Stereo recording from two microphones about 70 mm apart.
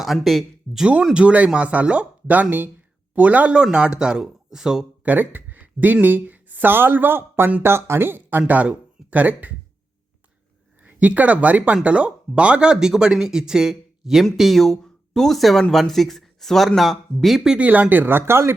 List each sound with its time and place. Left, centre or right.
0.0 s speech: centre
1.1 s speech: centre
5.0 s speech: right
10.8 s speech: right; by 17.6 s centre
17.6 s speech: right